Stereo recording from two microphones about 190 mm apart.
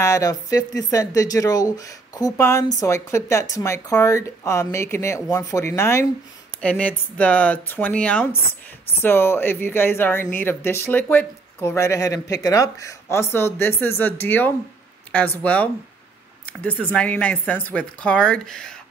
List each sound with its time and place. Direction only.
0.0 s speech: 15° left (ahead or behind)